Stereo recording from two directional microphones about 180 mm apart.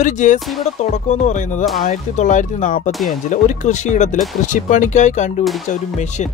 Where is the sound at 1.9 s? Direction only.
40° left (ahead or behind).